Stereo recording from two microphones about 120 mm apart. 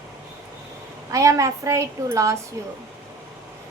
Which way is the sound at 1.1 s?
25° right (ahead or behind).